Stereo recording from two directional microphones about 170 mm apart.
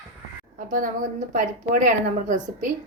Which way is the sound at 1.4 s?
50° right (ahead or behind).